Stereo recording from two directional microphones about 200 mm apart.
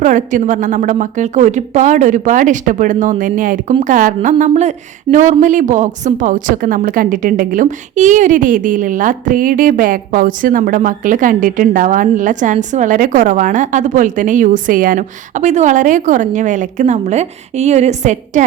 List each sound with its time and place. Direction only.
0.0 s a woman's voice: 40° right (ahead or behind)